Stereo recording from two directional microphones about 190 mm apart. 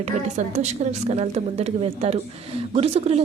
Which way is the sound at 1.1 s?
35° right (ahead or behind).